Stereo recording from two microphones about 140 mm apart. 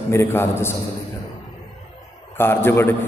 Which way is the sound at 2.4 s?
15° left (ahead or behind).